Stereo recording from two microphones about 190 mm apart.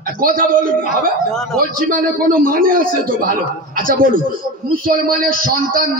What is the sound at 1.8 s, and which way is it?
Speech, 45° right (ahead or behind).